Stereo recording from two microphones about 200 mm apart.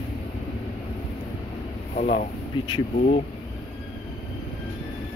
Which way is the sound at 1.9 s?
40° left (ahead or behind).